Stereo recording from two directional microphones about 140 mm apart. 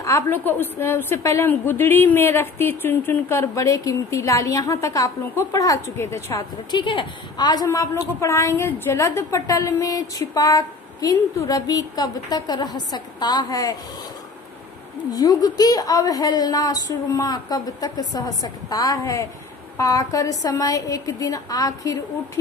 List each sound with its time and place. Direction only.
0.0 s a woman's voice: 20° left (ahead or behind)
6.7 s a woman's voice: 35° left (ahead or behind)
15.1 s a woman's voice: 25° left (ahead or behind)